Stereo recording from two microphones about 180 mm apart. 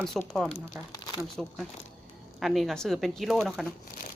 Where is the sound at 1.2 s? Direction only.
Centre (ahead or behind).